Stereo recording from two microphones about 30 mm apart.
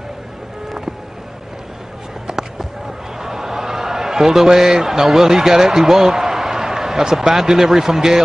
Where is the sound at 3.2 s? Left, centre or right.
Centre.